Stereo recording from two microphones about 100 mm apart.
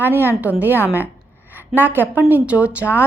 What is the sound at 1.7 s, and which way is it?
A woman's voice, 20° right (ahead or behind).